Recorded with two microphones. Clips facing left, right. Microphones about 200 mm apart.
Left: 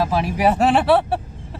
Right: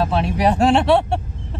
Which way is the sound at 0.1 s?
5° left (ahead or behind).